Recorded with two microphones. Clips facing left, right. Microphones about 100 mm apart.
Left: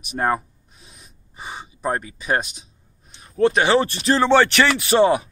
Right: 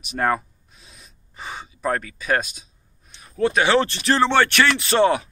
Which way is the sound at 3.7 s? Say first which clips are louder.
Left 1 dB; 20° left (ahead or behind).